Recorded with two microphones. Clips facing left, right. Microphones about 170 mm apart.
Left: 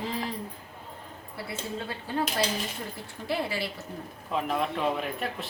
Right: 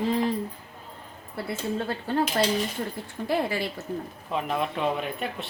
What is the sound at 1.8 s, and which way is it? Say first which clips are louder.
Speech: right 6 dB; 60° right (ahead or behind).